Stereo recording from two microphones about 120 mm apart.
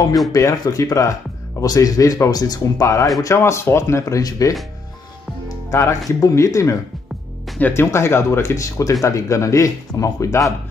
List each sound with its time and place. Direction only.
0.3 s speech: 30° left (ahead or behind)